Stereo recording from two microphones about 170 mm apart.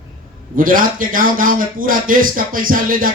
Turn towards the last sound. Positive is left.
turn(degrees=-55)  # may be behind; listen again after turning